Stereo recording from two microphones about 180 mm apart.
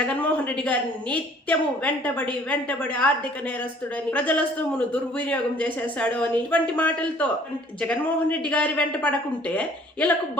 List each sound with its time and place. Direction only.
0.0 s a woman's voice: 5° left (ahead or behind)
4.1 s a woman's voice: 10° left (ahead or behind)